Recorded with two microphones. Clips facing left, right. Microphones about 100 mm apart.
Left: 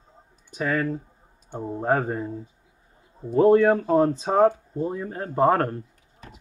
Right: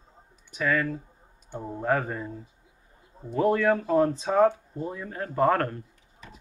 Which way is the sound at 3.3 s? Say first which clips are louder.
Left 6 dB; 30° left (ahead or behind).